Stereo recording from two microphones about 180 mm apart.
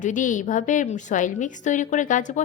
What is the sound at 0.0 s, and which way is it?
A woman's voice, 45° left (ahead or behind).